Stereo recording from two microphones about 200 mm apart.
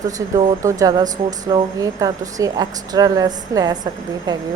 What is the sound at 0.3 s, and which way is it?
Speech, 15° right (ahead or behind).